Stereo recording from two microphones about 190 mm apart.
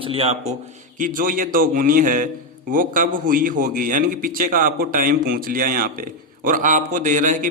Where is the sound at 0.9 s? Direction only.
45° right (ahead or behind).